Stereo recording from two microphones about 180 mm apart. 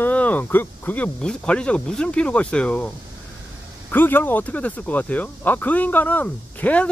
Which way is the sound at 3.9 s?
10° left (ahead or behind).